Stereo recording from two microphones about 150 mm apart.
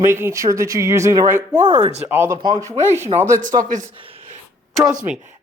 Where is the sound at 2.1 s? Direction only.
15° right (ahead or behind).